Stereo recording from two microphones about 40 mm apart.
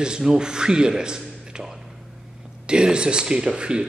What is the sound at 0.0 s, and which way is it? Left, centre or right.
A man's voice, centre.